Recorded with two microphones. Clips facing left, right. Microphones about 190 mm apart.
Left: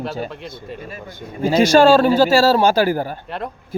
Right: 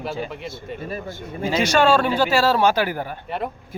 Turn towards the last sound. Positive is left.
turn(degrees=0)  # may be behind; listen again after turning